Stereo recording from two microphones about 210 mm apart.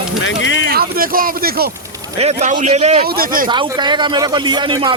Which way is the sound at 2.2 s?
35° right (ahead or behind).